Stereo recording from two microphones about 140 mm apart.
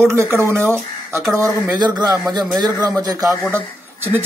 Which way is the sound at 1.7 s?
30° right (ahead or behind).